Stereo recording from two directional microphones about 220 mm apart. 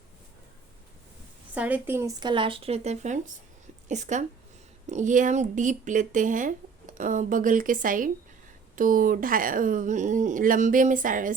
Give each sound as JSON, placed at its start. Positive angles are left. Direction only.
{"t": 1.5, "sound": "speech", "side_deg": -5}